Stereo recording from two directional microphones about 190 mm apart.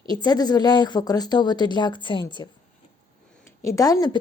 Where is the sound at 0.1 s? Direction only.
20° left (ahead or behind).